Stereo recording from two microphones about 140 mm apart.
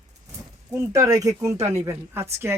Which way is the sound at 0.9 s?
25° right (ahead or behind).